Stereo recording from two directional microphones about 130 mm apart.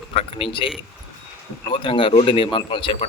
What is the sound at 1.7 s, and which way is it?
Speech, 45° left (ahead or behind).